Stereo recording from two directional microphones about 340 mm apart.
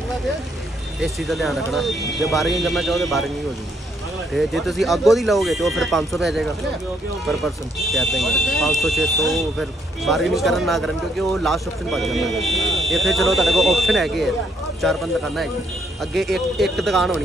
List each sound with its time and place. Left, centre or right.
1.0 s speech: centre
4.3 s speech: centre